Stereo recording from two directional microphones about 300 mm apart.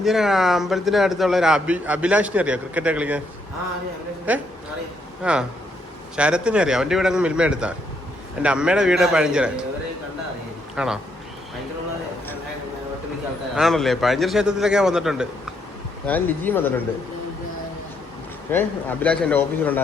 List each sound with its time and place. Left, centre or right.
0.0 s a man's voice: centre
4.3 s a man's voice: centre
10.8 s a man's voice: centre
13.6 s a man's voice: centre
18.5 s a man's voice: centre